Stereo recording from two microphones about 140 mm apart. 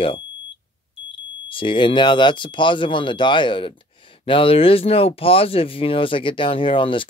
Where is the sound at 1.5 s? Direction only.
40° left (ahead or behind).